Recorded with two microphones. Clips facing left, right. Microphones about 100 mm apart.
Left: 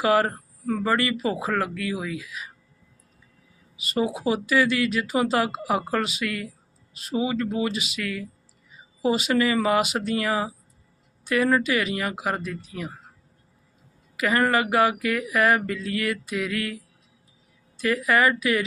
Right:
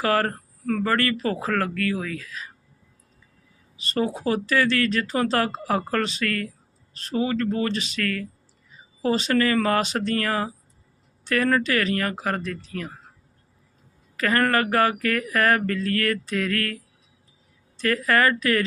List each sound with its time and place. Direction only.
0.0 s speech: 15° left (ahead or behind)
3.8 s speech: 10° left (ahead or behind)
14.2 s speech: 15° left (ahead or behind)